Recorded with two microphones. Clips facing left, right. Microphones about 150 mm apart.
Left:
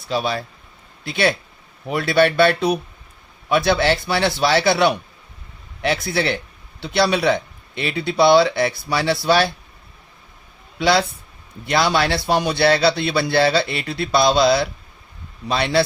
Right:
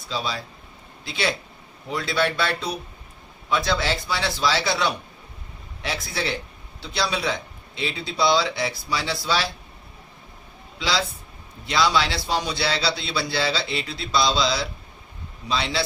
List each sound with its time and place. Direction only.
0.1 s a man's voice: 60° left (ahead or behind)
10.8 s a man's voice: 60° left (ahead or behind)